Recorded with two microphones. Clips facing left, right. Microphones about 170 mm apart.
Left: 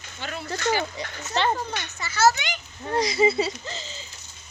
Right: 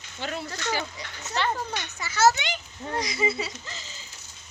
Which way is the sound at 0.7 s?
25° left (ahead or behind).